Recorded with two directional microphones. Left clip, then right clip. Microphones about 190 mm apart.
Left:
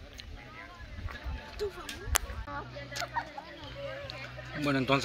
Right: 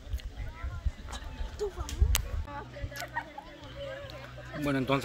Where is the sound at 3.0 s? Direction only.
5° right (ahead or behind).